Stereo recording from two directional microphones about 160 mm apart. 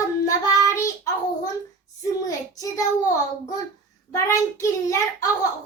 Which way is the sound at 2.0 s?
20° left (ahead or behind).